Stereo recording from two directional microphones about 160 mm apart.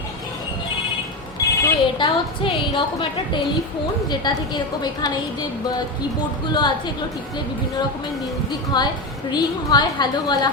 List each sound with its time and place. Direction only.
1.4 s telephone bell ringing: 20° left (ahead or behind)
2.0 s a woman's voice: 30° left (ahead or behind)
6.5 s a woman's voice: 25° left (ahead or behind)
8.7 s a woman's voice: 25° left (ahead or behind)